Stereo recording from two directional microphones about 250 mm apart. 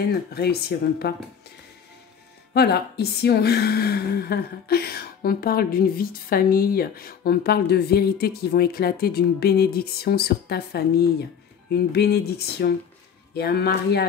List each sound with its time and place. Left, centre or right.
0.3 s a woman's voice: left
2.5 s a woman's voice: left